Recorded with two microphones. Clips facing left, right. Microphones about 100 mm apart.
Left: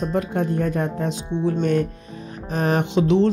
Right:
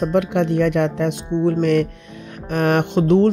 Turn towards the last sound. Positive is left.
turn(degrees=-50)  # may be behind; listen again after turning